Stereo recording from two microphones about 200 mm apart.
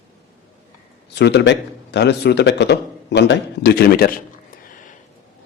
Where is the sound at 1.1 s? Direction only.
60° left (ahead or behind).